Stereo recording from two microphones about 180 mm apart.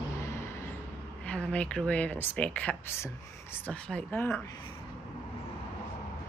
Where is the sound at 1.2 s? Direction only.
5° left (ahead or behind).